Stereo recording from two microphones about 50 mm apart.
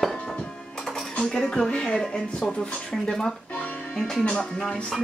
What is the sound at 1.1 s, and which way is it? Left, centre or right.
Speech, centre.